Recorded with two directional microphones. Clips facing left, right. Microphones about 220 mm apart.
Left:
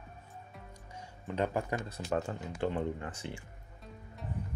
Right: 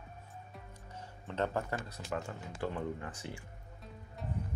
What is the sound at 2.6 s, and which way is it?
Speech, 25° left (ahead or behind).